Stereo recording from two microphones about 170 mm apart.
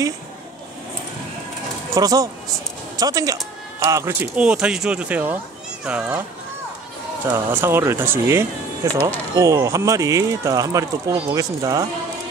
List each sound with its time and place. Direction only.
2.0 s speech: 20° right (ahead or behind)
7.2 s speech: 15° right (ahead or behind)